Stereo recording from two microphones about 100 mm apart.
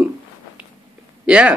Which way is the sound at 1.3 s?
10° right (ahead or behind).